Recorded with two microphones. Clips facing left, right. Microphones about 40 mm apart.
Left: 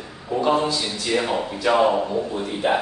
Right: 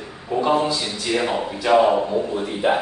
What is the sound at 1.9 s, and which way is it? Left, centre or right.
Speech, right.